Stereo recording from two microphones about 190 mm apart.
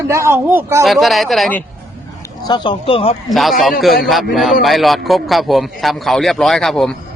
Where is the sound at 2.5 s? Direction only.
25° left (ahead or behind).